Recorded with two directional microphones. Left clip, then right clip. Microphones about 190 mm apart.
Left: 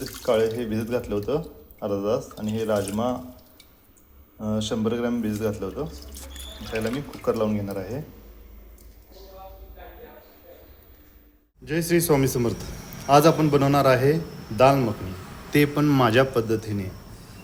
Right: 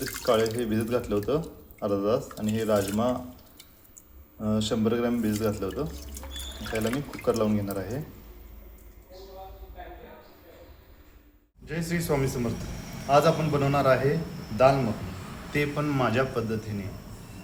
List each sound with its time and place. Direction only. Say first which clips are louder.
0.0 s speech: left 2 dB; centre (ahead or behind)
4.4 s speech: left 1 dB; centre (ahead or behind)
11.6 s a man's voice: left 9 dB; 45° left (ahead or behind)
15.5 s a man's voice: left 7 dB; 50° left (ahead or behind)